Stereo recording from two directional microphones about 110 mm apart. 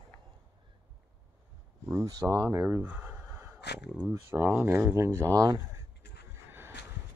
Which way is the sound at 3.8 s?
5° right (ahead or behind).